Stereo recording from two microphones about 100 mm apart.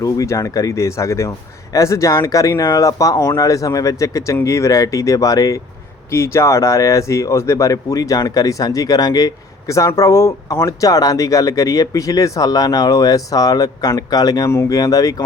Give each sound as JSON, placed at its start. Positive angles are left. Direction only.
{"t": 0.0, "sound": "speech", "side_deg": 35}